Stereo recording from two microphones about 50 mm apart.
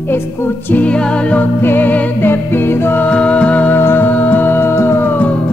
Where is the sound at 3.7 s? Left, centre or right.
Left.